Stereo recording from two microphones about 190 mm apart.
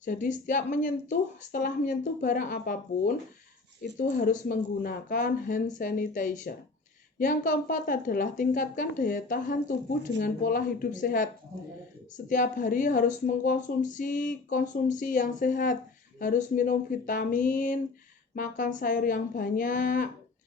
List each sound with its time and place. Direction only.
0.0 s speech: 40° left (ahead or behind)